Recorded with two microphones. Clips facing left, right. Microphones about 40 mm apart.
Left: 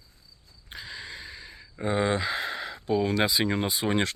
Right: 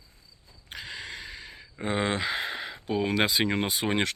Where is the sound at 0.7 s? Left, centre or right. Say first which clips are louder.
Right 1 dB; right.